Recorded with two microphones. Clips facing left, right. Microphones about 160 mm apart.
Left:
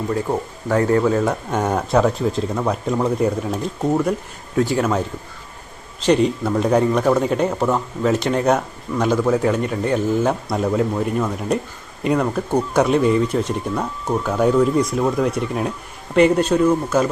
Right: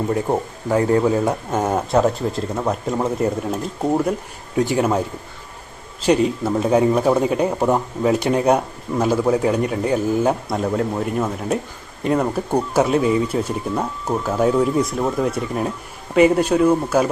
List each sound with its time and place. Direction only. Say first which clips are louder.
0.3 s speech: right 1 dB; 20° right (ahead or behind)
1.2 s speech: even; 5° right (ahead or behind)
6.1 s speech: even; 5° right (ahead or behind)